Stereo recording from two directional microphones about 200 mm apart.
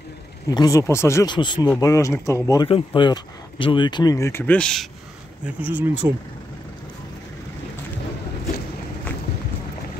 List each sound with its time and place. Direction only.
0.5 s speech: 15° left (ahead or behind)
5.4 s speech: 10° right (ahead or behind)